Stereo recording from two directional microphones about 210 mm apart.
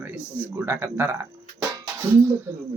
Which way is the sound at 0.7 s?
10° right (ahead or behind).